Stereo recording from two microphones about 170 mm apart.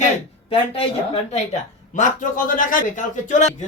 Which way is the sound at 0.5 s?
35° left (ahead or behind).